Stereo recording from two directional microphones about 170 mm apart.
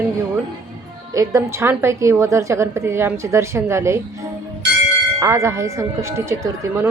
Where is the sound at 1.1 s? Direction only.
20° right (ahead or behind).